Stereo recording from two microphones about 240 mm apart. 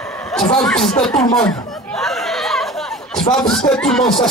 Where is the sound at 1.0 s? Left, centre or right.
Centre.